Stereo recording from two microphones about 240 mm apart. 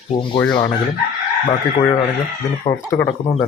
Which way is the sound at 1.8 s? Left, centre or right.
Centre.